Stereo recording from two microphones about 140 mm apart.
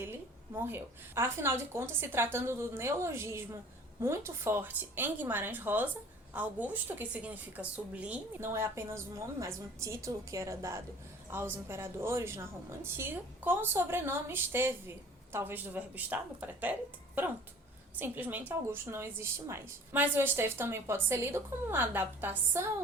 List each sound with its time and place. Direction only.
0.6 s a woman's voice: 15° right (ahead or behind)
18.0 s a woman's voice: 10° right (ahead or behind)